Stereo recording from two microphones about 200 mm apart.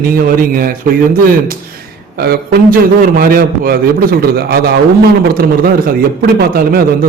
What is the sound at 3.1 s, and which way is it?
A man's voice, 45° right (ahead or behind).